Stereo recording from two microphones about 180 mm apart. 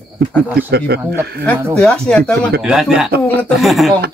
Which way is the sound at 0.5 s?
60° right (ahead or behind).